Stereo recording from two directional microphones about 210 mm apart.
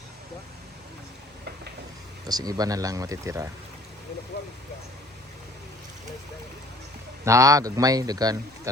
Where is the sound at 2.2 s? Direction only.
20° right (ahead or behind).